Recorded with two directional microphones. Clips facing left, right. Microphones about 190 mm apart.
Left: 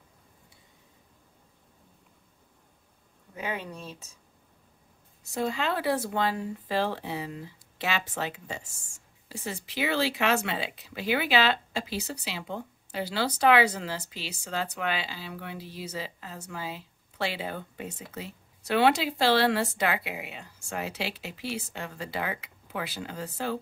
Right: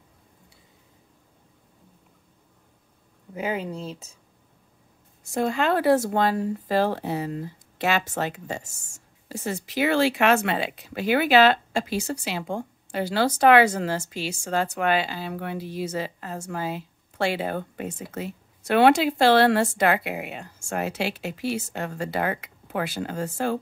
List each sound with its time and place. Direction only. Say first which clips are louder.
3.3 s speech: right 6 dB; 25° right (ahead or behind)
5.2 s speech: right 5 dB; 50° right (ahead or behind)